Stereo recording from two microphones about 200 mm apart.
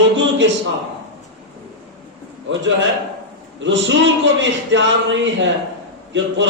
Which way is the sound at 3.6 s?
65° right (ahead or behind).